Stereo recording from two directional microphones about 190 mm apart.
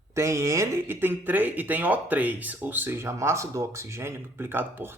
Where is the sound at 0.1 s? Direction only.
15° right (ahead or behind).